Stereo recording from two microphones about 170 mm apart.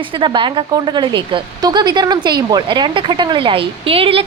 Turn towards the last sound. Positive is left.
turn(degrees=-35)  # may be behind; listen again after turning